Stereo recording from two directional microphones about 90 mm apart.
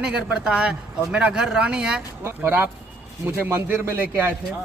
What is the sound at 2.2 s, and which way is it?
A man's voice, 25° right (ahead or behind).